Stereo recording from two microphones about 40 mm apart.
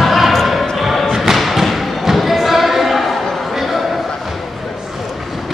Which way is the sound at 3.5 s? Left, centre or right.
Centre.